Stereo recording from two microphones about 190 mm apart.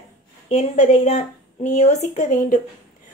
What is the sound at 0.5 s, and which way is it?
A woman's voice, 40° left (ahead or behind).